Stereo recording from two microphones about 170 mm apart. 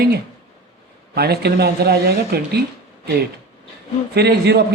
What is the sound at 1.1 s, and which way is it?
A man's voice, 70° right (ahead or behind).